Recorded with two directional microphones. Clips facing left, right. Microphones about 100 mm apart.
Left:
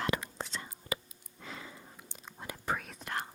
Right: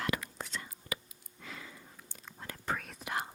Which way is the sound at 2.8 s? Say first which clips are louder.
Right 1 dB; centre (ahead or behind).